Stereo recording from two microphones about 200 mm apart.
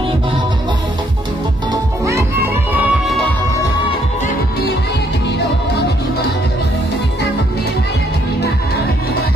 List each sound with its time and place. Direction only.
1.7 s music: 15° right (ahead or behind)
2.7 s music: 5° right (ahead or behind)